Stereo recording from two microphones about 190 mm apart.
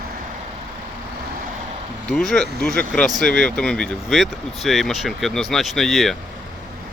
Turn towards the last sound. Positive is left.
turn(degrees=0)  # may be behind; listen again after turning